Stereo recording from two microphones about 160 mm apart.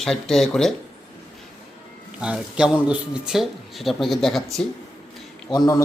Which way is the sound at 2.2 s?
5° right (ahead or behind).